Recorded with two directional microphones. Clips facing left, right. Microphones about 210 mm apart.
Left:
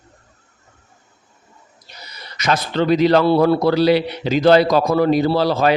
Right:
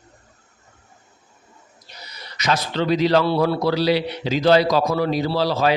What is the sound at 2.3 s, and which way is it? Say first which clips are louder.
A man's voice: left 3 dB; 55° left (ahead or behind).